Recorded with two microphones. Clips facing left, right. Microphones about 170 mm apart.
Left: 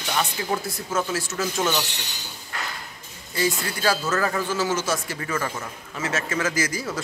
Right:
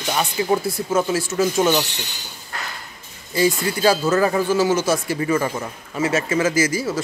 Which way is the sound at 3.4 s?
15° right (ahead or behind).